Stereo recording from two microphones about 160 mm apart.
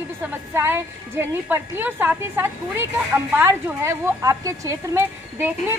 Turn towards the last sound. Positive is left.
turn(degrees=-15)  # may be behind; listen again after turning